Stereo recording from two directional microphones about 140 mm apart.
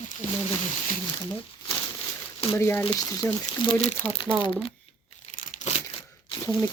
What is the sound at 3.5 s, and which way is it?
Speech, 55° left (ahead or behind).